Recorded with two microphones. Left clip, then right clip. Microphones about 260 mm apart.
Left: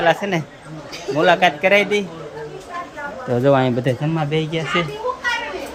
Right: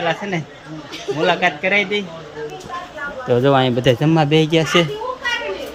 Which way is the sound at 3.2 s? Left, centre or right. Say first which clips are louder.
Right 1 dB; centre.